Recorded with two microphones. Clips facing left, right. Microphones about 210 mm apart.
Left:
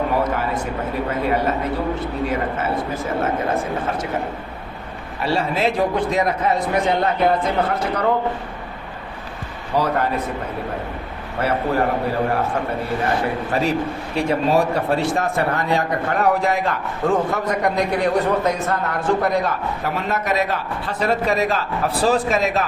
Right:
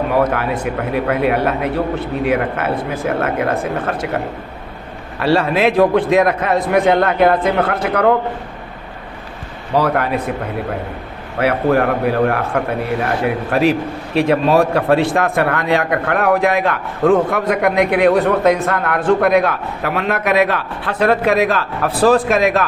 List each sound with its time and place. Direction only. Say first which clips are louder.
0.1 s speech: right 4 dB; 65° right (ahead or behind)
5.2 s a man's voice: right 6 dB; 70° right (ahead or behind)
9.7 s a man's voice: right 4 dB; 65° right (ahead or behind)
11.3 s a man's voice: right 5 dB; 70° right (ahead or behind)